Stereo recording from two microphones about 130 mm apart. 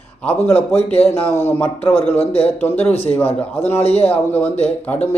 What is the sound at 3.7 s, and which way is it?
Speech, 50° left (ahead or behind).